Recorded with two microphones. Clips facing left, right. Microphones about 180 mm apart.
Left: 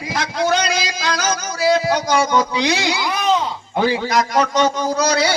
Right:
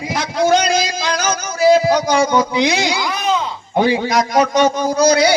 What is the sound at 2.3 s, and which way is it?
A man's voice, 15° right (ahead or behind).